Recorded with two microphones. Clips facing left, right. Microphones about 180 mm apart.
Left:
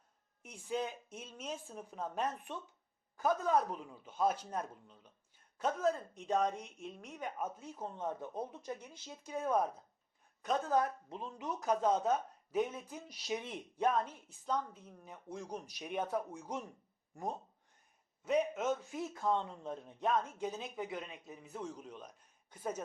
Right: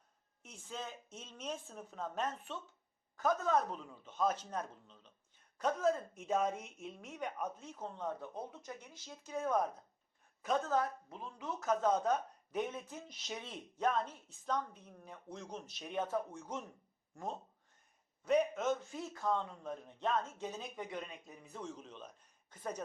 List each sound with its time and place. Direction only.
0.4 s speech: 15° left (ahead or behind)
9.2 s speech: 10° left (ahead or behind)
18.2 s speech: 5° left (ahead or behind)
19.2 s speech: 25° left (ahead or behind)